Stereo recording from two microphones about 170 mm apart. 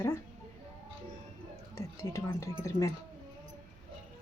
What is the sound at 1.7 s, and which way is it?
Speech, 20° left (ahead or behind).